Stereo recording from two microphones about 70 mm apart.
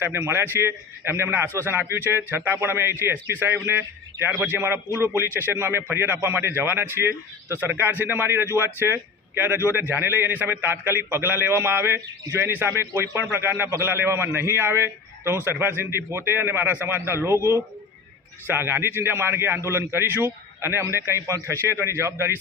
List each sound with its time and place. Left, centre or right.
0.0 s a man's voice: right
3.7 s a man's voice: right
7.6 s a man's voice: right